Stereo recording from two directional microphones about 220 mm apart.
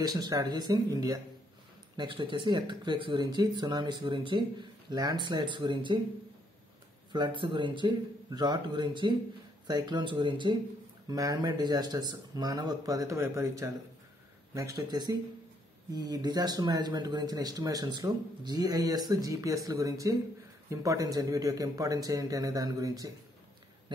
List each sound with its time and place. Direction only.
0.0 s speech: 15° right (ahead or behind)
7.1 s speech: 20° right (ahead or behind)